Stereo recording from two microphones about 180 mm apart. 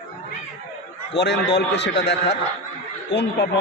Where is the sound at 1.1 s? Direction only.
75° left (ahead or behind).